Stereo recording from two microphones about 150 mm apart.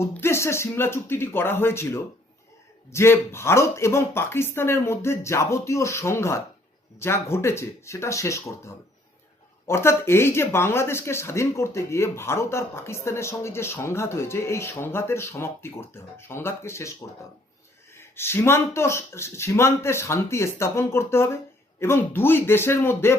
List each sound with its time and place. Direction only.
0.0 s speech: 15° left (ahead or behind)
17.9 s speech: 15° left (ahead or behind)